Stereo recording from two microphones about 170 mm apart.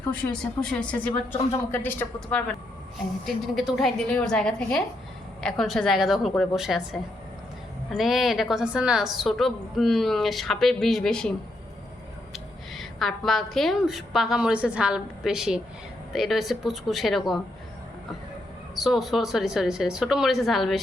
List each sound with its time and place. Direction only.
0.3 s speech: 5° left (ahead or behind)
3.2 s a woman's voice: centre (ahead or behind)
18.8 s a woman's voice: centre (ahead or behind)